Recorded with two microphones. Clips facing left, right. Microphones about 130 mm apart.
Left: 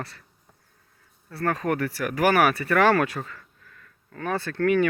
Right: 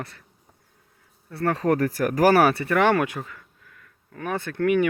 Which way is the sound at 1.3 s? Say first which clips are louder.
Right 3 dB; 25° right (ahead or behind).